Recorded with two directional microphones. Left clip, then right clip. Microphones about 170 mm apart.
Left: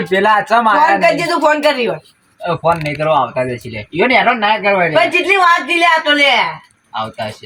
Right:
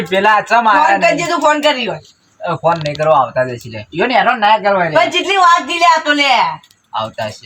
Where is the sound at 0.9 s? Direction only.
5° left (ahead or behind).